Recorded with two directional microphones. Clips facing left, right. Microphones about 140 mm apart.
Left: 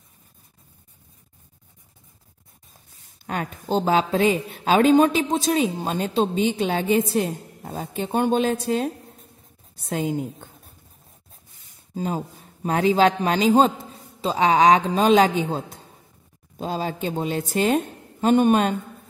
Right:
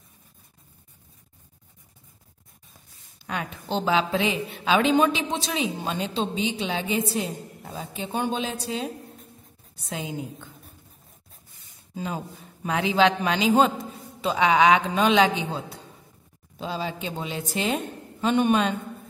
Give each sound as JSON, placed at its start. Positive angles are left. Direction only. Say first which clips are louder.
{"t": 3.3, "sound": "a woman's voice", "louder": "left 4 dB", "side_deg": 45}
{"t": 11.9, "sound": "a woman's voice", "louder": "left 5 dB", "side_deg": 40}